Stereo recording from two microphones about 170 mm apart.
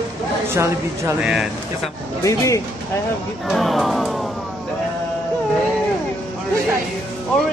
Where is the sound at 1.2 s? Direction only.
5° right (ahead or behind).